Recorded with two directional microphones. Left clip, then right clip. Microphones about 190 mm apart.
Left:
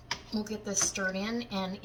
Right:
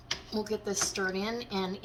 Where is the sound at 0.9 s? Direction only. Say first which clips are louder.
Right 1 dB; 25° right (ahead or behind).